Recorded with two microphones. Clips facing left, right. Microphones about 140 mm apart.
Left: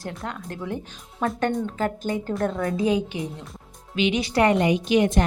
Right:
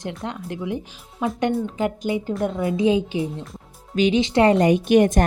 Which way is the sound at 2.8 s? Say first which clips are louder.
Right 5 dB; 25° right (ahead or behind).